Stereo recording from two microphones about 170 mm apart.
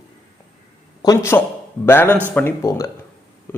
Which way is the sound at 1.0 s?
20° left (ahead or behind).